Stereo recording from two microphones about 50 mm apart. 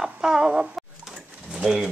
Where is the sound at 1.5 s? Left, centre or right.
Centre.